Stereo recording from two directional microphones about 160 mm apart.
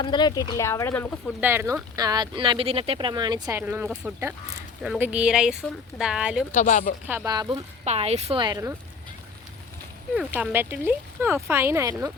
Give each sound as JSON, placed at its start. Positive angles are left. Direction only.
{"t": 0.0, "sound": "speech", "side_deg": 30}
{"t": 1.4, "sound": "speech", "side_deg": -15}
{"t": 2.0, "sound": "speech", "side_deg": -25}
{"t": 3.6, "sound": "speech", "side_deg": -15}
{"t": 6.5, "sound": "a woman's voice", "side_deg": 50}
{"t": 7.3, "sound": "speech", "side_deg": -25}
{"t": 7.9, "sound": "a woman's voice", "side_deg": -40}
{"t": 8.4, "sound": "speech", "side_deg": -25}
{"t": 10.2, "sound": "speech", "side_deg": -10}